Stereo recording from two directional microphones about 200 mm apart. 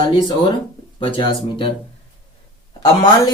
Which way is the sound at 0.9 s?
25° left (ahead or behind).